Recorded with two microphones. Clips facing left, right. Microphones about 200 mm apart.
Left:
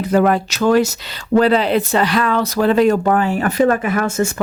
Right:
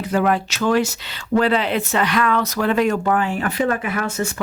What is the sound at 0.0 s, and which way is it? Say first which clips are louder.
Speech: left 4 dB; 40° left (ahead or behind).